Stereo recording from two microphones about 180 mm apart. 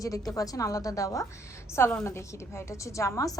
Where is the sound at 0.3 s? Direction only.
20° left (ahead or behind).